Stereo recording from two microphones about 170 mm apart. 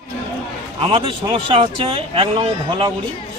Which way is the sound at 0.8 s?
30° right (ahead or behind).